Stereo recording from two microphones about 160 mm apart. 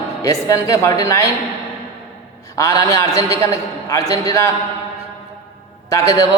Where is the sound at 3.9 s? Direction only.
20° left (ahead or behind).